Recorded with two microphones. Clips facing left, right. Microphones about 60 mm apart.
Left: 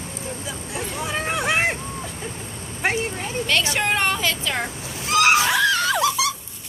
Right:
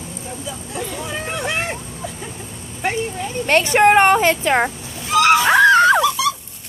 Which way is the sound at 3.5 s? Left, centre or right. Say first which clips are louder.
Right 10 dB; right.